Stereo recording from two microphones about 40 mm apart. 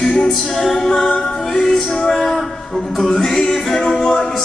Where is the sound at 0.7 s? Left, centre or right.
Centre.